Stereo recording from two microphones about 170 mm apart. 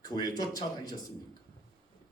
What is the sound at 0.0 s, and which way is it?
Speech, 25° left (ahead or behind).